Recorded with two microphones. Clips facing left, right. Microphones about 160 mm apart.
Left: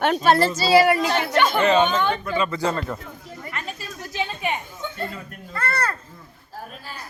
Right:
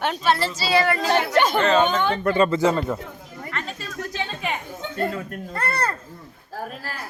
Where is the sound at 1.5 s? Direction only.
10° left (ahead or behind).